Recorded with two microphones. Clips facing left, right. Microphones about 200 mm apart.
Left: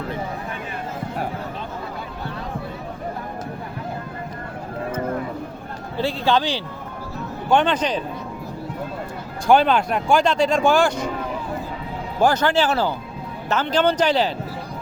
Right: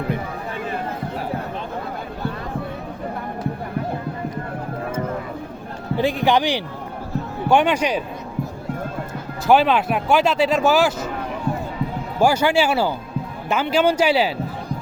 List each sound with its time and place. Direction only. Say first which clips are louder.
6.0 s a man's voice: right 2 dB; 15° right (ahead or behind)
9.5 s speech: even; 5° right (ahead or behind)
12.2 s a man's voice: right 1 dB; 10° right (ahead or behind)